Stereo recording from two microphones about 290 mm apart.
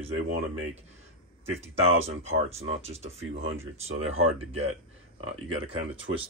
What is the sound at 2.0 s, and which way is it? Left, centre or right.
Speech, right.